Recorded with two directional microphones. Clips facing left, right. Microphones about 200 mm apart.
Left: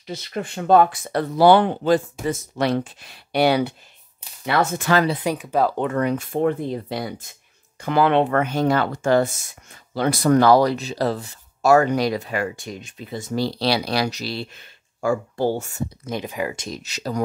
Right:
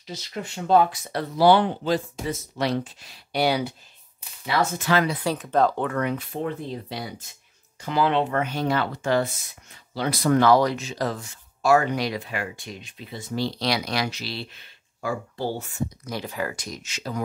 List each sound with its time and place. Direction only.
0.0 s speech: 55° left (ahead or behind)
4.5 s speech: 50° left (ahead or behind)
5.2 s speech: 15° left (ahead or behind)
5.8 s speech: 25° left (ahead or behind)
6.0 s speech: 50° left (ahead or behind)
16.0 s speech: 20° left (ahead or behind); by 17.2 s 40° left (ahead or behind)